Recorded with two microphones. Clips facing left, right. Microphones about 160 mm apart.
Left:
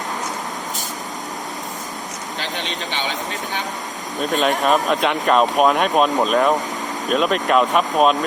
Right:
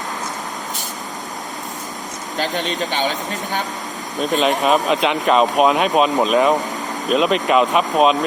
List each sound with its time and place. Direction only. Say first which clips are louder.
2.4 s speech: right 7 dB; 45° right (ahead or behind)
4.2 s speech: right 1 dB; centre (ahead or behind)